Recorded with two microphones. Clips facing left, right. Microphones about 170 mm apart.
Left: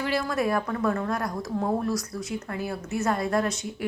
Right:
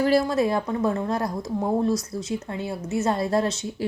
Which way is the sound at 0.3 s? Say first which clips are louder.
Right 3 dB; 25° right (ahead or behind).